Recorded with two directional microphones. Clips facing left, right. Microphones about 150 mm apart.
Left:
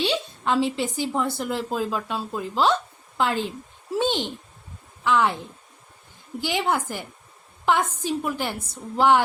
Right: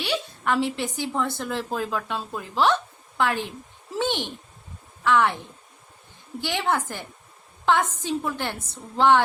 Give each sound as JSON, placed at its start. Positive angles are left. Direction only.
{"t": 0.0, "sound": "a woman's voice", "side_deg": 20}
{"t": 6.4, "sound": "a woman's voice", "side_deg": 15}